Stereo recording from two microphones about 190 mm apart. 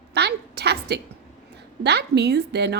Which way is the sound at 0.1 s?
60° right (ahead or behind).